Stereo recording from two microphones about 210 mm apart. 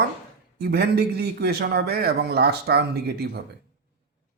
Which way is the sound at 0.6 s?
50° right (ahead or behind).